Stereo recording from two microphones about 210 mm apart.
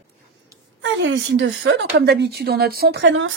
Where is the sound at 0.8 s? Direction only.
60° right (ahead or behind).